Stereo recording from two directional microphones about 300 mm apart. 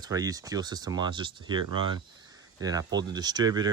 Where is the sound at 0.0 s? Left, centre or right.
Centre.